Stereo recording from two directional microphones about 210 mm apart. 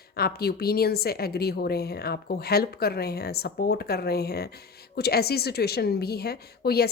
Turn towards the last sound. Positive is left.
turn(degrees=50)  # may be behind; listen again after turning